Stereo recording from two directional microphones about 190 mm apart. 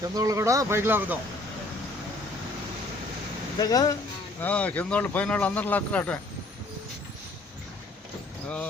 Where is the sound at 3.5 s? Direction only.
20° left (ahead or behind).